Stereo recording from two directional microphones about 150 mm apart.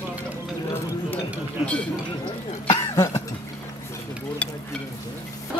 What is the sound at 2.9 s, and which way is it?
Cough, 20° left (ahead or behind).